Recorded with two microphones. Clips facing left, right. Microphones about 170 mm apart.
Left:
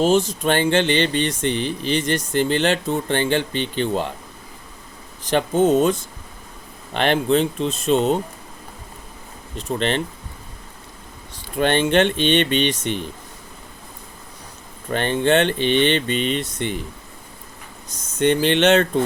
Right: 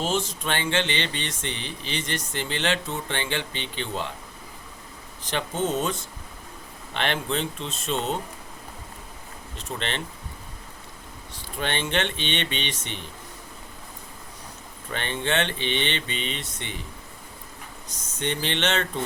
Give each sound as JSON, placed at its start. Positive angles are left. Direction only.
{"t": 0.0, "sound": "speech", "side_deg": 40}
{"t": 5.3, "sound": "speech", "side_deg": 45}
{"t": 9.6, "sound": "speech", "side_deg": 40}
{"t": 11.5, "sound": "speech", "side_deg": 45}
{"t": 14.8, "sound": "speech", "side_deg": 40}
{"t": 17.9, "sound": "speech", "side_deg": 45}